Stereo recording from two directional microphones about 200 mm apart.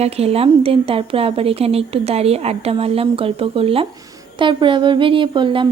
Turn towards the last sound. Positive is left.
turn(degrees=-25)  # may be behind; listen again after turning